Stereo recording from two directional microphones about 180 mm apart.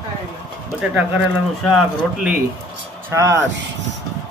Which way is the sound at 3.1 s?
15° right (ahead or behind).